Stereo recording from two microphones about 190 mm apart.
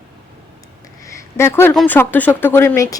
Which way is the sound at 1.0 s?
15° left (ahead or behind).